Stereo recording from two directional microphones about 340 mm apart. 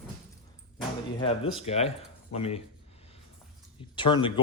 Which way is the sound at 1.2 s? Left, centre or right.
Centre.